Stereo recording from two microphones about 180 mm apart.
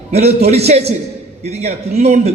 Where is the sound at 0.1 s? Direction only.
35° right (ahead or behind).